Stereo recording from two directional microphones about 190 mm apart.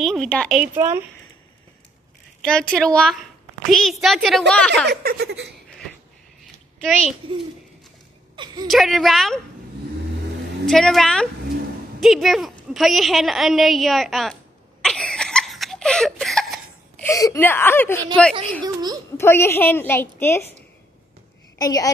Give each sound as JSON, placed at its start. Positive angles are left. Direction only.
{"t": 0.0, "sound": "a child's voice", "side_deg": 0}
{"t": 2.4, "sound": "a child's voice", "side_deg": 5}
{"t": 4.8, "sound": "speech", "side_deg": -55}
{"t": 6.8, "sound": "a child's voice", "side_deg": 0}
{"t": 8.6, "sound": "a child's voice", "side_deg": 0}
{"t": 10.6, "sound": "a child's voice", "side_deg": 0}
{"t": 12.7, "sound": "a sound", "side_deg": 0}
{"t": 17.0, "sound": "speech", "side_deg": 15}
{"t": 18.6, "sound": "speech", "side_deg": -20}
{"t": 19.1, "sound": "speech", "side_deg": 15}
{"t": 21.5, "sound": "a woman's voice", "side_deg": 20}